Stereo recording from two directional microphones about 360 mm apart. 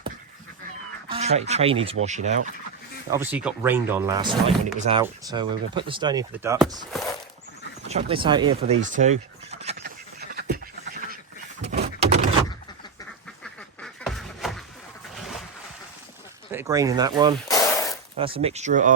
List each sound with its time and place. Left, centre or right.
1.0 s speech: centre
3.1 s speech: centre
7.9 s pant: centre
11.6 s door: right
13.4 s duck: centre
16.5 s speech: centre
17.5 s a sound: centre
18.2 s speech: centre